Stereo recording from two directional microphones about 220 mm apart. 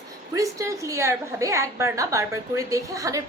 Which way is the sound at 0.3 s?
15° right (ahead or behind).